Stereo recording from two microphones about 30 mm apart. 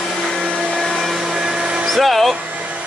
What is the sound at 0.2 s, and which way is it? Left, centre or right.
Vacuum cleaner, centre.